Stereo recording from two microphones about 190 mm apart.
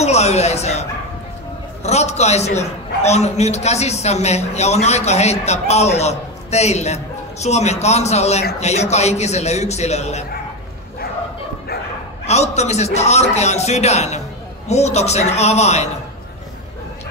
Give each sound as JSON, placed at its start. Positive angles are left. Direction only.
{"t": 0.0, "sound": "a man's voice", "side_deg": 35}
{"t": 12.3, "sound": "a man's voice", "side_deg": 35}